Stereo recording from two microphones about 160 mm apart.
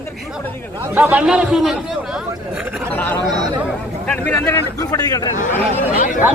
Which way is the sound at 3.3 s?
25° right (ahead or behind).